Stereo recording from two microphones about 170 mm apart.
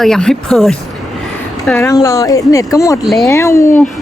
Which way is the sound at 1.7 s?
20° left (ahead or behind).